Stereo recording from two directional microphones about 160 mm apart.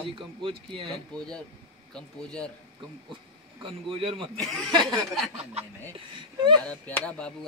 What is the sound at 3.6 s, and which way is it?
Speech, 35° right (ahead or behind).